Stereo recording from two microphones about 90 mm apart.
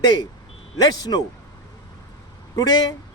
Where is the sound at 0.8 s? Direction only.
45° left (ahead or behind).